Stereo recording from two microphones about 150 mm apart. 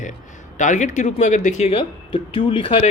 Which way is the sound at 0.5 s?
55° left (ahead or behind).